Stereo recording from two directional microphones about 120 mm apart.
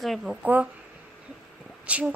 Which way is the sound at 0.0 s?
Centre (ahead or behind).